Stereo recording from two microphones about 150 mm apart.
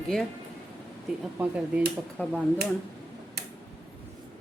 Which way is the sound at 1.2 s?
10° right (ahead or behind).